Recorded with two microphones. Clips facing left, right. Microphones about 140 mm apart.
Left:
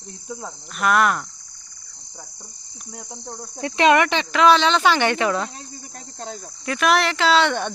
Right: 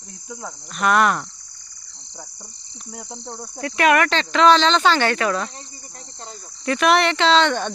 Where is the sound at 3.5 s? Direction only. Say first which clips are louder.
Left 1 dB; 25° left (ahead or behind).